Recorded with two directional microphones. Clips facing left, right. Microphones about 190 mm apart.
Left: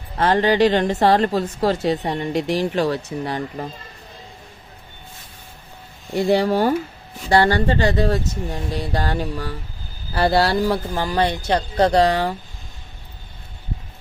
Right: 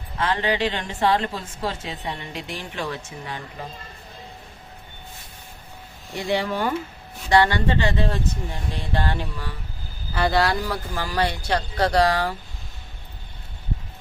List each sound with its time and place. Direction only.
0.2 s a woman's voice: 40° left (ahead or behind)
6.1 s a woman's voice: 40° left (ahead or behind); by 12.3 s 20° left (ahead or behind)